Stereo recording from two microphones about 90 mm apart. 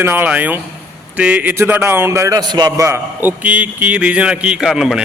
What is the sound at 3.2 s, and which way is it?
A man's voice, 20° right (ahead or behind).